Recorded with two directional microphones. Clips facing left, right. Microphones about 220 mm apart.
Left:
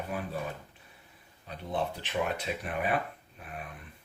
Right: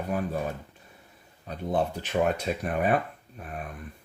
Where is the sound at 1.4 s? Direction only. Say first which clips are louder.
Right 6 dB; 45° right (ahead or behind).